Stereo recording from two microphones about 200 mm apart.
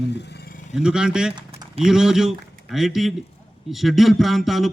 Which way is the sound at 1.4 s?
20° right (ahead or behind).